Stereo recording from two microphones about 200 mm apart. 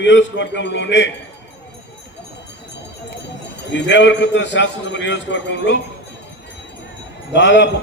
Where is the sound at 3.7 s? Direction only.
65° left (ahead or behind).